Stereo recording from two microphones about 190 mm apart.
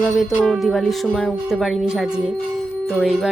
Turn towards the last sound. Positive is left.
turn(degrees=0)  # may be behind; listen again after turning